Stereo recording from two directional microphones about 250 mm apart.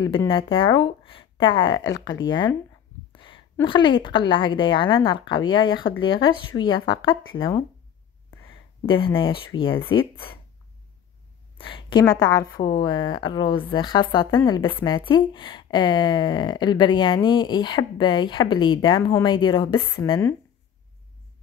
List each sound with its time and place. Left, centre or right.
0.0 s a woman's voice: centre
8.8 s a woman's voice: left
11.6 s a woman's voice: centre